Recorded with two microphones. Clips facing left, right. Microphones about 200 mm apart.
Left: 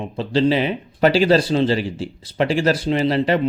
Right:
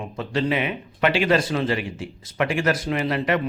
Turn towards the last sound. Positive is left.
turn(degrees=30)  # may be behind; listen again after turning